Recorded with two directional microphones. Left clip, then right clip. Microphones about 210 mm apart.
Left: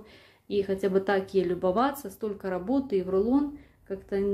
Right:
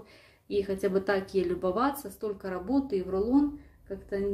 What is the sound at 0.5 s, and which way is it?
Speech, 20° left (ahead or behind).